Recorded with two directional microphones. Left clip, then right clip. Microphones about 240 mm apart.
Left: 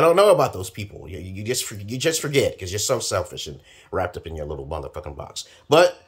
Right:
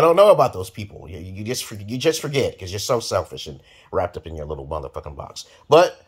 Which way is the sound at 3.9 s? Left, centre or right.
Centre.